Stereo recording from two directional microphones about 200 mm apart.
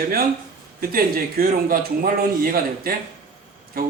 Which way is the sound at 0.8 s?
45° right (ahead or behind).